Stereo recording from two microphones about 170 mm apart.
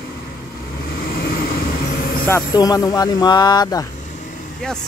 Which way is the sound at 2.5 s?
20° left (ahead or behind).